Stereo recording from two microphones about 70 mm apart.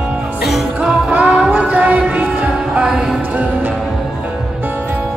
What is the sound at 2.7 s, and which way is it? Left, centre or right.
Music, centre.